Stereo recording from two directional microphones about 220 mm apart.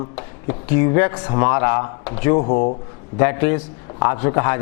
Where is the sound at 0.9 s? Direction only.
20° left (ahead or behind).